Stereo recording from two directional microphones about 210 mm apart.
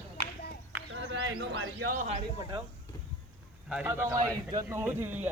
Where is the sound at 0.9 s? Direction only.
60° right (ahead or behind).